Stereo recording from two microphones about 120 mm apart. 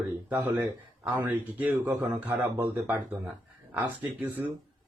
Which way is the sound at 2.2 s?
15° right (ahead or behind).